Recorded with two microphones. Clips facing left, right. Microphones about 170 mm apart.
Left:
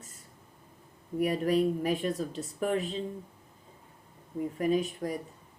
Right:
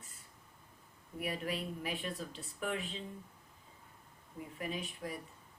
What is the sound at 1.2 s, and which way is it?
Speech, 40° left (ahead or behind).